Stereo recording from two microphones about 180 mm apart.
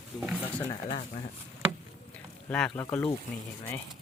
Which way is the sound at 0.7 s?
25° left (ahead or behind).